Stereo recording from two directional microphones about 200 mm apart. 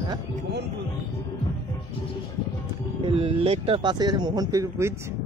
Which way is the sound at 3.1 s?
30° right (ahead or behind).